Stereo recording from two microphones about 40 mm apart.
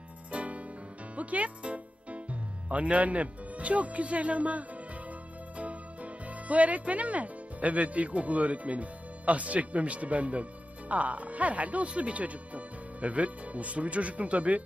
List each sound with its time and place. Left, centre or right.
0.3 s music: right
2.6 s speech: right